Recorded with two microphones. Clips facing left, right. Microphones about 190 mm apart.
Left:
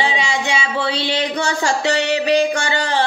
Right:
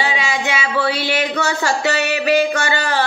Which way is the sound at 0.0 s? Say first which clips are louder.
Even; 25° left (ahead or behind).